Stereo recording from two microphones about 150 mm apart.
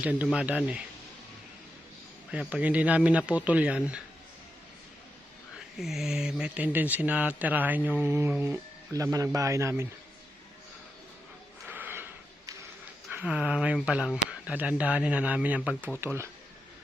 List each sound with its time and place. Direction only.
0.0 s speech: 10° right (ahead or behind)
2.3 s speech: 10° right (ahead or behind)
5.5 s speech: centre (ahead or behind); by 9.8 s 20° right (ahead or behind)
11.7 s a sound: 15° right (ahead or behind)
13.1 s speech: 10° right (ahead or behind)